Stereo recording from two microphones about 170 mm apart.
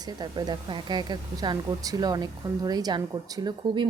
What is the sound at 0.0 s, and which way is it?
A woman's voice, 25° right (ahead or behind).